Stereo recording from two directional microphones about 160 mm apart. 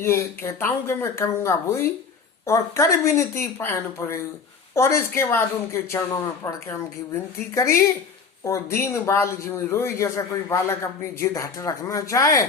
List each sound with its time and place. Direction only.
0.0 s a man's voice: 15° left (ahead or behind)